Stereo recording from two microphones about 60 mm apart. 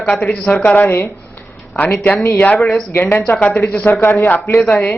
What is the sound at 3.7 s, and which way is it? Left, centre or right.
Speech, left.